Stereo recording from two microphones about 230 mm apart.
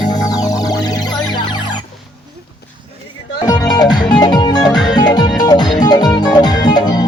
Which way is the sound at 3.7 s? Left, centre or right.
Centre.